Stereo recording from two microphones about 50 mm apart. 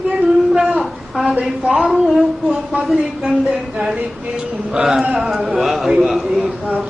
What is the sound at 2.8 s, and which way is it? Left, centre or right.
A woman's voice, centre.